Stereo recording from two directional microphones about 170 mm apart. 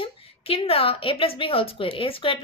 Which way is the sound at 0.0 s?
30° left (ahead or behind).